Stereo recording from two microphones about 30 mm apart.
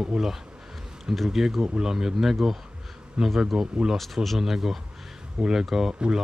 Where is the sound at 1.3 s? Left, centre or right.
Centre.